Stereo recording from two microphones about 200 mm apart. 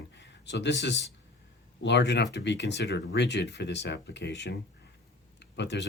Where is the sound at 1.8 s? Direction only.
60° left (ahead or behind).